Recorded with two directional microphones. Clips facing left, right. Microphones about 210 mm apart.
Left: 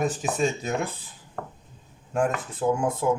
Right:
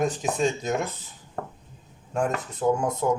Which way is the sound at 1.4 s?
35° right (ahead or behind).